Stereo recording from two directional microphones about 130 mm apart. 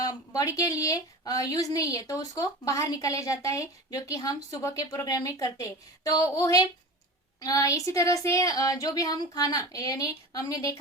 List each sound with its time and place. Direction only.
0.0 s speech: 30° left (ahead or behind)